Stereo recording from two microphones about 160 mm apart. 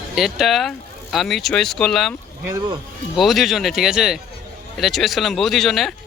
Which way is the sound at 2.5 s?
30° right (ahead or behind).